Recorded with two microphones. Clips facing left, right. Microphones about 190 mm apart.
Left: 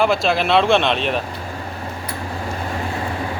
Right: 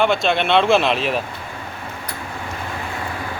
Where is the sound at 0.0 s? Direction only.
Centre (ahead or behind).